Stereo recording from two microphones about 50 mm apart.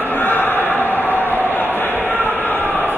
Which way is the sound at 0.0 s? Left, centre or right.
Left.